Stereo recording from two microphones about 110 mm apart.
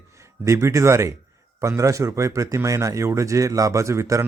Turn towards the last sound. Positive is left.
turn(degrees=-25)  # may be behind; listen again after turning